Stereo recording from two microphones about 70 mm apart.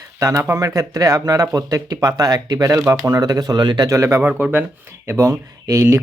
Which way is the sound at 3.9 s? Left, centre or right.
Right.